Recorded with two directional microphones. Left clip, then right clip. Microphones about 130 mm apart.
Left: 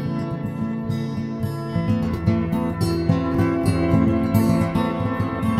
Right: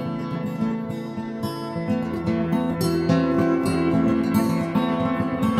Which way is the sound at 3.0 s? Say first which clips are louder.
Right 4 dB; 15° right (ahead or behind).